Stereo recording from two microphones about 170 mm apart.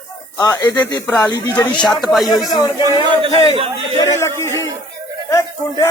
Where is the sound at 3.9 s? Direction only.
20° left (ahead or behind).